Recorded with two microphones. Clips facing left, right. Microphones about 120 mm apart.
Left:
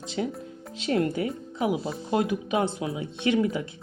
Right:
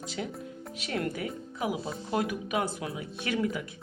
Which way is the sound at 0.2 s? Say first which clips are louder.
Left 7 dB; 30° left (ahead or behind).